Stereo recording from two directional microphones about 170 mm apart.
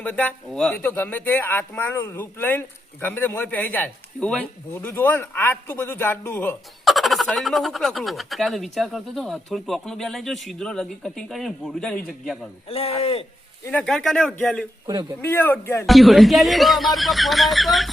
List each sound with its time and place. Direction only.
0.0 s speech: 10° left (ahead or behind)
6.8 s speech: centre (ahead or behind)
12.6 s speech: 35° left (ahead or behind)
13.7 s speech: 5° left (ahead or behind)
15.9 s speech: centre (ahead or behind)